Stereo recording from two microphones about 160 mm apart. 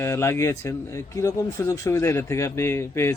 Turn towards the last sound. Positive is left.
turn(degrees=15)  # may be behind; listen again after turning